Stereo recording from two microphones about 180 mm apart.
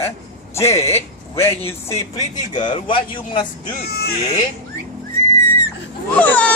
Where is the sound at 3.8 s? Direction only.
60° left (ahead or behind).